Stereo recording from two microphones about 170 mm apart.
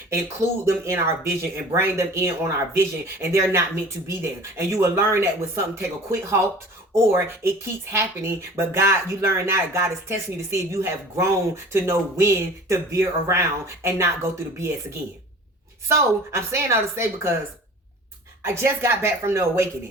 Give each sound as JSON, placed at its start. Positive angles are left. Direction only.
{"t": 0.6, "sound": "speech", "side_deg": -15}
{"t": 18.4, "sound": "speech", "side_deg": -15}